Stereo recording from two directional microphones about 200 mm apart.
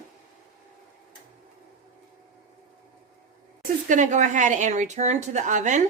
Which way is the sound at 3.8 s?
40° right (ahead or behind).